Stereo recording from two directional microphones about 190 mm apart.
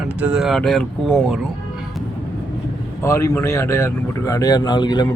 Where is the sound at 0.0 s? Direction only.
5° right (ahead or behind).